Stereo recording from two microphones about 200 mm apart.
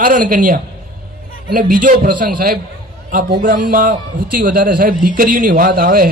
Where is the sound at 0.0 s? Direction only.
45° right (ahead or behind).